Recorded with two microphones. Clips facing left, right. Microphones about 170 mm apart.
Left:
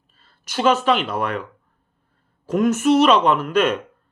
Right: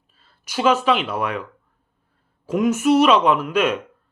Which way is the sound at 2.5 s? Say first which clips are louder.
Even; 10° right (ahead or behind).